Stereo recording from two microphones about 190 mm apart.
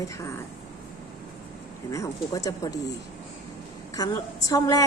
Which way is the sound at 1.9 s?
15° left (ahead or behind).